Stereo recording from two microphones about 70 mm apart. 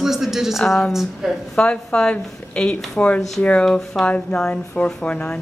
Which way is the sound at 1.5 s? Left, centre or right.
Centre.